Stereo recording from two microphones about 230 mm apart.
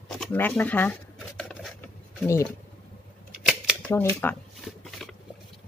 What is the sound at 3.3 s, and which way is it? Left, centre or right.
Scissors, centre.